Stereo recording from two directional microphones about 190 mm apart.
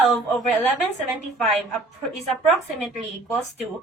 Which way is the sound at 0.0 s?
Centre (ahead or behind).